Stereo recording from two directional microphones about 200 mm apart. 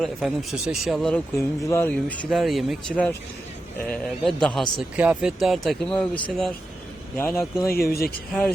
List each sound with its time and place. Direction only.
0.0 s speech: centre (ahead or behind)
7.7 s speech: 50° left (ahead or behind)
8.3 s speech: 5° left (ahead or behind)